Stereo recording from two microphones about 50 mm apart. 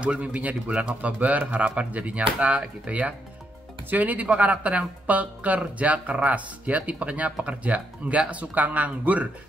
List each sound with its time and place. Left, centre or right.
0.0 s speech: right